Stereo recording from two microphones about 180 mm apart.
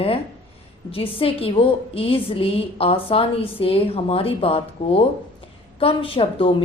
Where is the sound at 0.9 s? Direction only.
30° left (ahead or behind).